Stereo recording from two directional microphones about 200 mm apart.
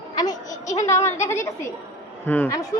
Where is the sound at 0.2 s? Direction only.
20° left (ahead or behind).